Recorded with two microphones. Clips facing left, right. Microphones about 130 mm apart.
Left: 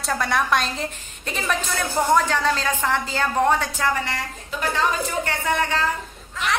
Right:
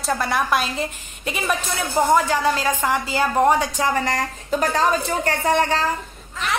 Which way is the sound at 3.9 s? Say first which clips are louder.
Right 4 dB; 40° right (ahead or behind).